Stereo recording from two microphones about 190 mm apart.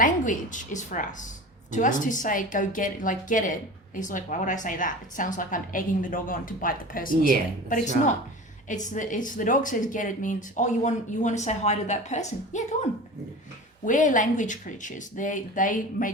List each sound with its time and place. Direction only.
0.0 s a woman's voice: 40° left (ahead or behind)
13.8 s a woman's voice: 45° left (ahead or behind)